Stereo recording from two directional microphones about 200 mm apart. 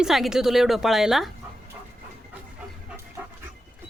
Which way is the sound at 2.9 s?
15° right (ahead or behind).